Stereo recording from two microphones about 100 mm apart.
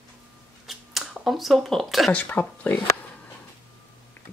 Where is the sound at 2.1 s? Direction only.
15° left (ahead or behind).